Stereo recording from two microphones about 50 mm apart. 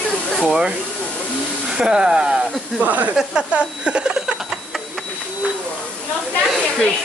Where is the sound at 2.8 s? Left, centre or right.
Right.